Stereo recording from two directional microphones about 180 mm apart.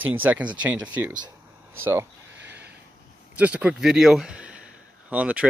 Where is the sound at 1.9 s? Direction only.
15° right (ahead or behind).